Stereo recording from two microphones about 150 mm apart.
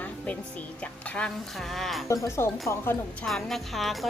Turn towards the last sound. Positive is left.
turn(degrees=0)  # may be behind; listen again after turning